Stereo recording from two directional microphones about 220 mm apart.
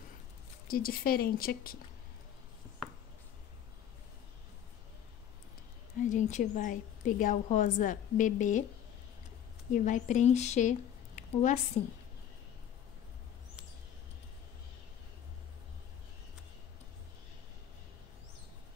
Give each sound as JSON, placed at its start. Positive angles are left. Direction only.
{"t": 0.7, "sound": "a woman's voice", "side_deg": 40}
{"t": 6.0, "sound": "a woman's voice", "side_deg": 35}
{"t": 9.7, "sound": "a woman's voice", "side_deg": 35}